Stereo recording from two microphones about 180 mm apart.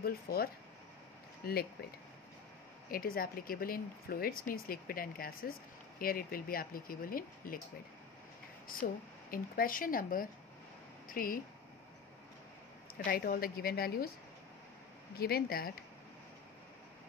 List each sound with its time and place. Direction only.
0.0 s a woman's voice: 55° left (ahead or behind)
2.9 s speech: 55° left (ahead or behind)
8.6 s speech: 50° left (ahead or behind)
13.0 s a woman's voice: 55° left (ahead or behind)
15.1 s a woman's voice: 60° left (ahead or behind)